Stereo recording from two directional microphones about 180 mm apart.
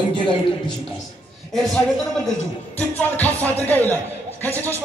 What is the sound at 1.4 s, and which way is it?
A man's voice, centre (ahead or behind).